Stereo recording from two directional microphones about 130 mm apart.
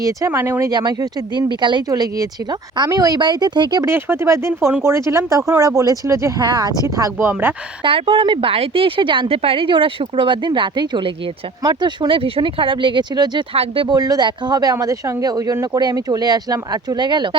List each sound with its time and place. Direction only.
0.3 s speech: 15° right (ahead or behind)
0.7 s speech: 35° right (ahead or behind)
3.8 s speech: 20° right (ahead or behind)
7.9 s speech: 45° right (ahead or behind)